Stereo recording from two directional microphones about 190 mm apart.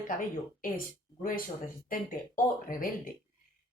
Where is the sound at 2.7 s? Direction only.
45° left (ahead or behind).